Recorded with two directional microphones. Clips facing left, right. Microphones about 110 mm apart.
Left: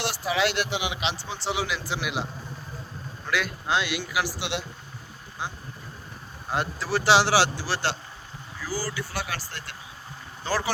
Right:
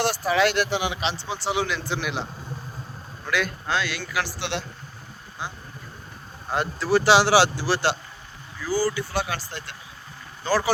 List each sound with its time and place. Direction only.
0.0 s speech: 45° right (ahead or behind)
1.5 s a man's voice: 5° left (ahead or behind)
3.2 s a man's voice: 5° left (ahead or behind)
3.7 s speech: 15° left (ahead or behind)
6.5 s a man's voice: centre (ahead or behind)
7.3 s speech: 15° right (ahead or behind)